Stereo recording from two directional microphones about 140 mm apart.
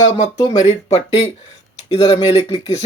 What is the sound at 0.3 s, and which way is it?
Speech, 30° left (ahead or behind).